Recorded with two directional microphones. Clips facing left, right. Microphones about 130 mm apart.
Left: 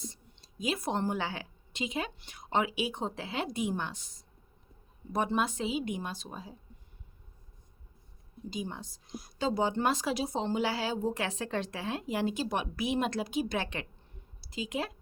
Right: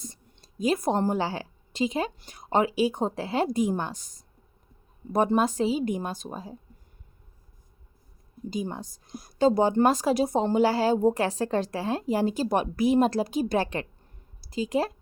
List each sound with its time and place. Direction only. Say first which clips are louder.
0.0 s a woman's voice: right 1 dB; 45° right (ahead or behind)
8.4 s a woman's voice: right 6 dB; 45° right (ahead or behind)